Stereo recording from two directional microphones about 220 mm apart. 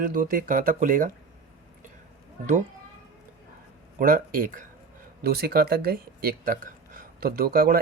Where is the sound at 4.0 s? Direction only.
40° right (ahead or behind).